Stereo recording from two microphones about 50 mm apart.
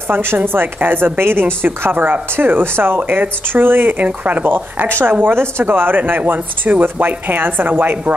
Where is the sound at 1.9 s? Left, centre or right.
Right.